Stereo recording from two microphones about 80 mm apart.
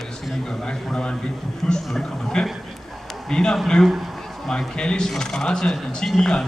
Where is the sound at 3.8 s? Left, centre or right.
Centre.